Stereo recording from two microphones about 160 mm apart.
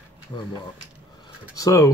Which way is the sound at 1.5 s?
20° left (ahead or behind).